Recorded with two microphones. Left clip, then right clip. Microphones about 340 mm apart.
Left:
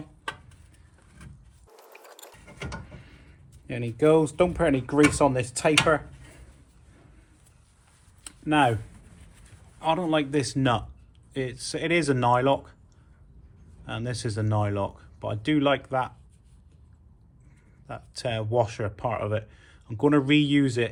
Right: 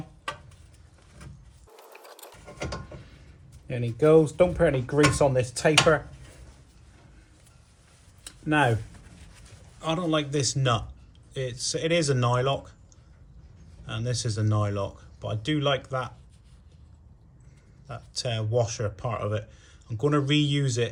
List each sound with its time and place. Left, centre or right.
1.2 s mechanisms: centre
3.7 s speech: left
9.8 s speech: centre
13.8 s speech: centre
17.8 s speech: centre